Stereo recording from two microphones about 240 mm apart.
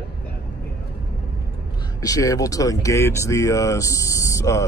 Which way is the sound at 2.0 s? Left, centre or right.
Centre.